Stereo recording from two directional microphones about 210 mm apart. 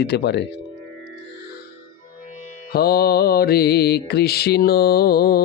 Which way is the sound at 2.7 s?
45° left (ahead or behind).